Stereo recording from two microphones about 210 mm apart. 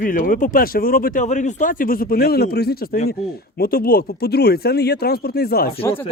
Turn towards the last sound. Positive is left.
turn(degrees=45)  # may be behind; listen again after turning